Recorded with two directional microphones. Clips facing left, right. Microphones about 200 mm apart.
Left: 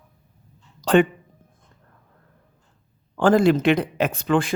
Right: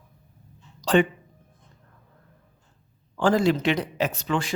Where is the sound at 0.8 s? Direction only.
55° left (ahead or behind).